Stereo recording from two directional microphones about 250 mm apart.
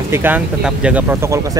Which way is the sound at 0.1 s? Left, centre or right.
Centre.